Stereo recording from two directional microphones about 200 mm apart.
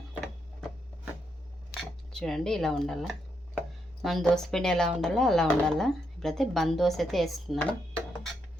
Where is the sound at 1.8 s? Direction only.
Centre (ahead or behind).